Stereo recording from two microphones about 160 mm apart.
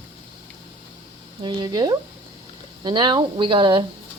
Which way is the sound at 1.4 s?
25° right (ahead or behind).